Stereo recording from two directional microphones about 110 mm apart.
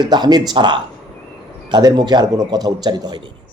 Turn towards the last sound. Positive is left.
turn(degrees=-40)  # may be behind; listen again after turning